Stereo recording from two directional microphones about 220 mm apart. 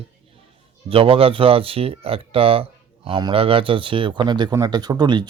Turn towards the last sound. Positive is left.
turn(degrees=-20)  # may be behind; listen again after turning